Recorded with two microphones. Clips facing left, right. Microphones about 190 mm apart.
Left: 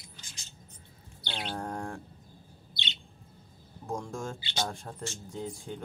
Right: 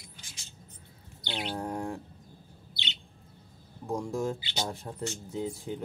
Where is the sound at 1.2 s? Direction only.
10° right (ahead or behind).